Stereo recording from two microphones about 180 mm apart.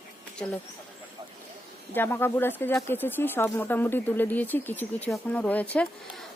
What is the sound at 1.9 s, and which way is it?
Speech, 10° left (ahead or behind).